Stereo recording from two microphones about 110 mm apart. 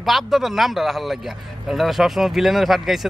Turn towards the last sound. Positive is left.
turn(degrees=0)  # may be behind; listen again after turning